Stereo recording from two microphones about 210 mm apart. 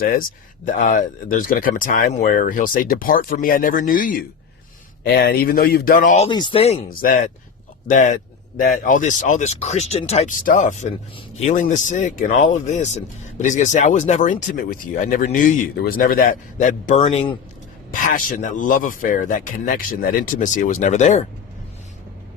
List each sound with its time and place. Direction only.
0.0 s speech: 40° left (ahead or behind)
6.9 s speech: 40° left (ahead or behind)
17.0 s speech: 25° left (ahead or behind)
18.0 s speech: 40° left (ahead or behind)